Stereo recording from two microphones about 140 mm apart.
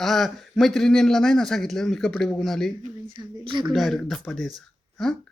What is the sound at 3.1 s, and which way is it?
Speech, 35° right (ahead or behind).